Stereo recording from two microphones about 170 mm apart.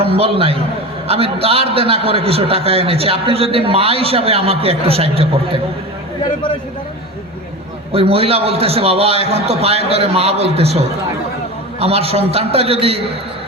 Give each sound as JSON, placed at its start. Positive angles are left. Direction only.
{"t": 0.0, "sound": "a man's voice", "side_deg": -35}
{"t": 7.9, "sound": "a man's voice", "side_deg": -35}